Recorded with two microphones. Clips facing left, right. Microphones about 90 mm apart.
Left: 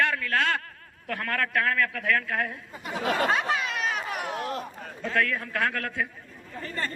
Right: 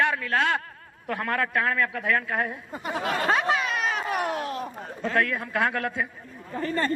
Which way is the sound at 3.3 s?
55° right (ahead or behind).